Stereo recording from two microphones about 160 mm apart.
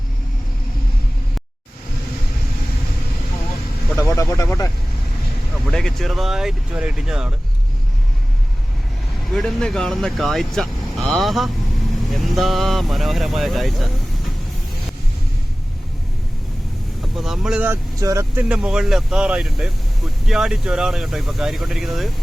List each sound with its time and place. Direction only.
4.0 s speech: 20° left (ahead or behind)
5.6 s speech: 5° left (ahead or behind)
9.3 s speech: 5° left (ahead or behind)
17.2 s speech: centre (ahead or behind); by 18.4 s 20° right (ahead or behind)
18.4 s speech: 5° right (ahead or behind)